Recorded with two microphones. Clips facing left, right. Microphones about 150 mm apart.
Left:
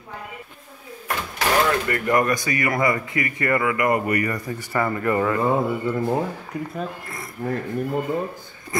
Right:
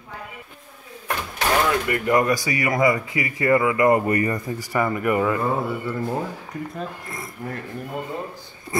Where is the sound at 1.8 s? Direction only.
20° right (ahead or behind).